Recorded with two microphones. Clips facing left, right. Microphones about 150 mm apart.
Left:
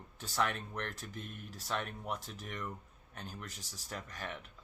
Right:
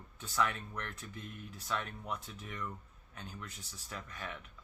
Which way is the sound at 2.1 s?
90° left.